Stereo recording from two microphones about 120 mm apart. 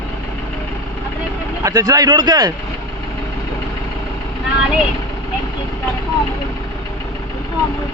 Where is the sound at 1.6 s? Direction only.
30° right (ahead or behind).